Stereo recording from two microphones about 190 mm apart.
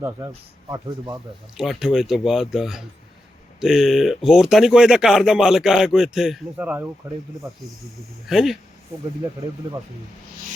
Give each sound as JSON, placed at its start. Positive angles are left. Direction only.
{"t": 0.7, "sound": "speech", "side_deg": -20}
{"t": 1.5, "sound": "speech", "side_deg": 0}
{"t": 8.3, "sound": "speech", "side_deg": 0}